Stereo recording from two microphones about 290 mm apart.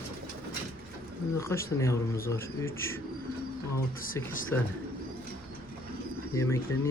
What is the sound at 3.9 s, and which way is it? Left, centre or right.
Speech, left.